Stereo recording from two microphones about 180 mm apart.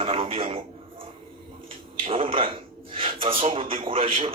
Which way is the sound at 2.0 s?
30° right (ahead or behind).